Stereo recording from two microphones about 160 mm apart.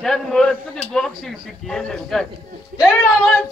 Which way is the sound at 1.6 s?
5° left (ahead or behind).